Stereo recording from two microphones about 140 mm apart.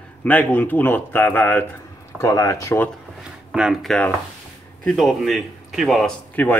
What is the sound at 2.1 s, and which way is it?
Speech, 25° left (ahead or behind).